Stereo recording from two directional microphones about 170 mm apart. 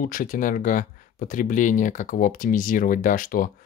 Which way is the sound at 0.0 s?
55° left (ahead or behind).